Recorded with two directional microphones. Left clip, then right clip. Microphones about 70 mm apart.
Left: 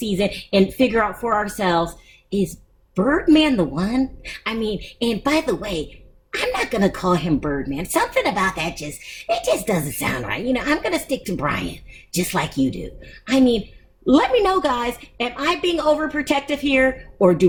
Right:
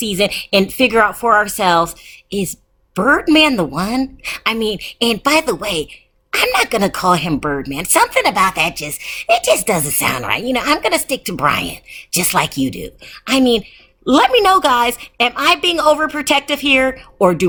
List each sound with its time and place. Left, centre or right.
0.0 s a woman's voice: right
2.9 s a woman's voice: right